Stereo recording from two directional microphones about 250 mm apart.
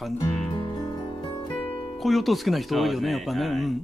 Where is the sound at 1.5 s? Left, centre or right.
Centre.